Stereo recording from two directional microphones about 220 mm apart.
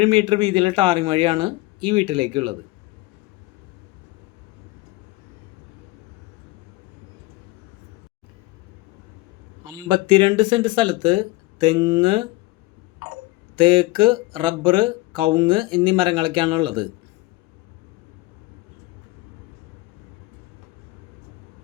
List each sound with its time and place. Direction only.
0.0 s speech: 25° right (ahead or behind)
9.7 s speech: 20° right (ahead or behind)
13.6 s speech: 20° right (ahead or behind)